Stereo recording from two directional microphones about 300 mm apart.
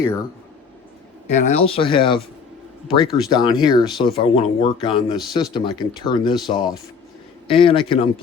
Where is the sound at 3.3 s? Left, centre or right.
Centre.